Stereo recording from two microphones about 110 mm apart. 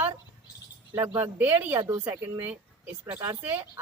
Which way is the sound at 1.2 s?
15° right (ahead or behind).